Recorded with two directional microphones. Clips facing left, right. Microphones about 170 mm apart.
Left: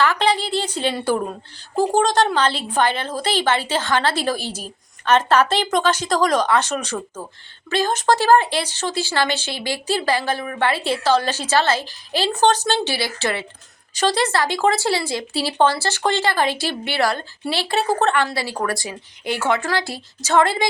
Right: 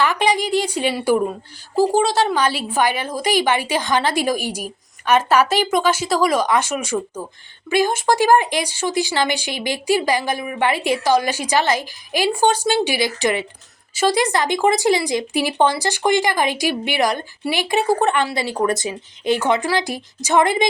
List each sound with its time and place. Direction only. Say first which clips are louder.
0.0 s speech: right 1 dB; 15° right (ahead or behind)